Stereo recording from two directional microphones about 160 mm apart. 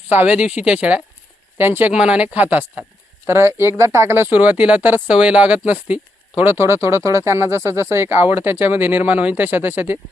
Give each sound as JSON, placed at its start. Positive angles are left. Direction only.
{"t": 0.1, "sound": "speech", "side_deg": -10}